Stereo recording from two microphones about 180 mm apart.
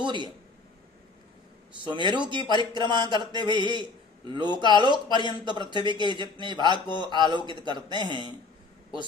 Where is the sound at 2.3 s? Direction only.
25° right (ahead or behind).